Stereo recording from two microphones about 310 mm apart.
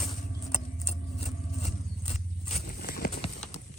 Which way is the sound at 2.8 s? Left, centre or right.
Left.